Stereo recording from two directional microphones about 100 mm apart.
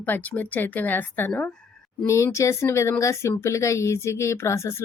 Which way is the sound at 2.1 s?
30° left (ahead or behind).